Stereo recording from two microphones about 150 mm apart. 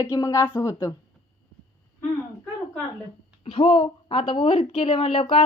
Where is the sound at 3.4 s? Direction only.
35° left (ahead or behind).